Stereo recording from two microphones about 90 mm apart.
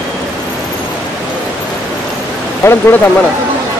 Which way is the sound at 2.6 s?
25° left (ahead or behind).